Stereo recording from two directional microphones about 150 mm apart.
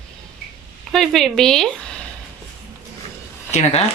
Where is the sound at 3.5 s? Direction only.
45° left (ahead or behind).